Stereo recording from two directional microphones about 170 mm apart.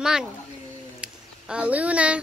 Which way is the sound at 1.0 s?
5° right (ahead or behind).